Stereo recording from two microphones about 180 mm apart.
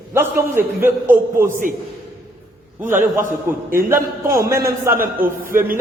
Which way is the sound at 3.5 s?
50° right (ahead or behind).